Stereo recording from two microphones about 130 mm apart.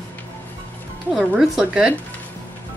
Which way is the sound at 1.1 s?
5° right (ahead or behind).